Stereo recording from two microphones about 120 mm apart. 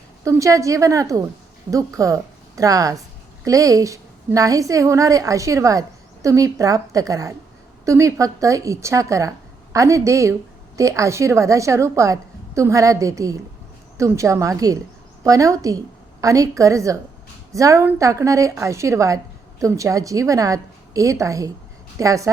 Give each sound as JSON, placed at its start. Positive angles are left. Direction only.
{"t": 0.3, "sound": "a woman's voice", "side_deg": -25}